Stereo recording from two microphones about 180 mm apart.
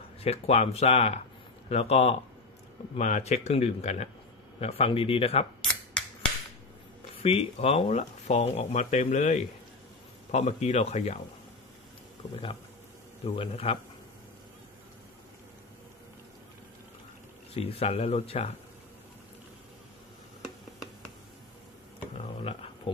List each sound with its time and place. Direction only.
0.2 s speech: 35° left (ahead or behind)
7.2 s speech: 35° left (ahead or behind)
13.2 s speech: 35° left (ahead or behind)
17.6 s speech: 35° left (ahead or behind)
22.1 s a sound: 35° left (ahead or behind)